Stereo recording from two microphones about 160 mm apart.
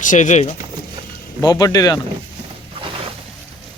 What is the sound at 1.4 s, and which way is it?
Speech, 25° left (ahead or behind).